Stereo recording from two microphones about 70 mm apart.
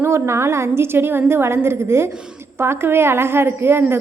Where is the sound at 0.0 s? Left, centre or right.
Right.